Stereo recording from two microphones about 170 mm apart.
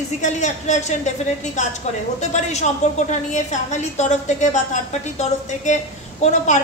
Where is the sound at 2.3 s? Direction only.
45° left (ahead or behind).